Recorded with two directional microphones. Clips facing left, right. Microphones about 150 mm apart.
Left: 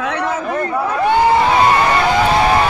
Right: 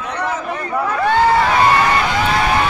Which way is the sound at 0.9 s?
15° left (ahead or behind).